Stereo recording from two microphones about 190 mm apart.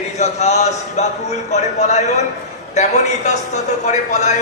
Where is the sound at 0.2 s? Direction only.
35° left (ahead or behind).